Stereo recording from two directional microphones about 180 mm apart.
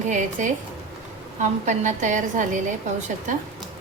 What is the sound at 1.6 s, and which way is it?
A woman's voice, 40° right (ahead or behind).